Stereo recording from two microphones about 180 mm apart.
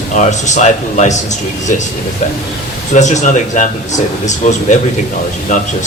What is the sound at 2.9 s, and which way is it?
Speech, 40° left (ahead or behind).